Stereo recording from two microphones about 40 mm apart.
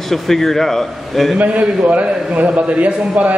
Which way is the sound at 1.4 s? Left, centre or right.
Right.